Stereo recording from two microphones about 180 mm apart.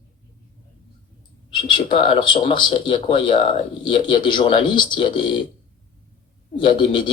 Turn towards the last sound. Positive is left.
turn(degrees=30)  # may be behind; listen again after turning